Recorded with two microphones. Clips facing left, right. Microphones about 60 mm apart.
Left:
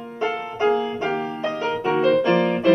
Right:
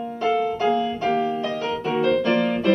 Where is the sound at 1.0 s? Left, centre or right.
Left.